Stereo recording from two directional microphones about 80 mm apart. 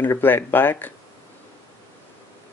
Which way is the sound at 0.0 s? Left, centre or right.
Left.